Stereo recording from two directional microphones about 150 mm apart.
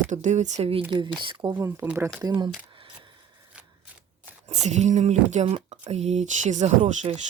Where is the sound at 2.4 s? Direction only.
35° right (ahead or behind).